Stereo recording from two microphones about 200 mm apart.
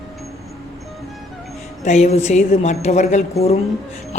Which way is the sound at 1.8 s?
35° left (ahead or behind).